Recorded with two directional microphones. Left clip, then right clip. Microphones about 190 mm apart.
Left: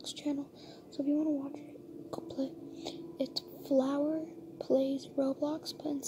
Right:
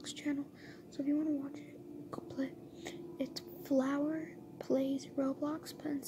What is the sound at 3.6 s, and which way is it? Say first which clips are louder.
A woman's voice: left 3 dB; 5° right (ahead or behind).